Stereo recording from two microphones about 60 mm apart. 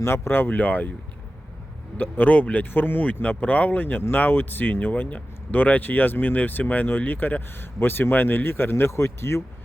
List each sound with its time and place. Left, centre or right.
0.0 s speech: left
2.0 s speech: left
8.7 s speech: left